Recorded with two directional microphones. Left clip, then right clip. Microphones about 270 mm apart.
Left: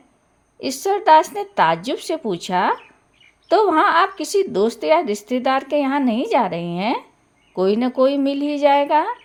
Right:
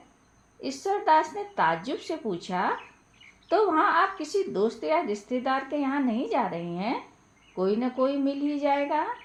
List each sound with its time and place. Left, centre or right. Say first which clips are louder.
0.6 s speech: left 8 dB; left